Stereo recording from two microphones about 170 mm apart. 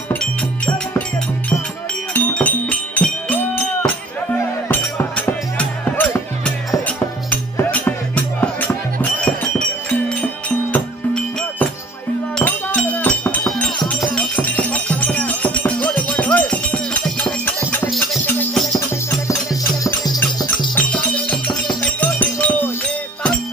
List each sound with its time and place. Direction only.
0.1 s music: 10° left (ahead or behind)
2.1 s music: 10° left (ahead or behind)
12.4 s music: 10° left (ahead or behind)
18.7 s music: 20° left (ahead or behind)
20.7 s music: 10° left (ahead or behind)